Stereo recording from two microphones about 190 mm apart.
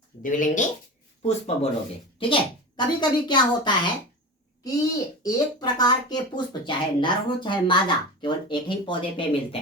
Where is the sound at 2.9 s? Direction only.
25° left (ahead or behind).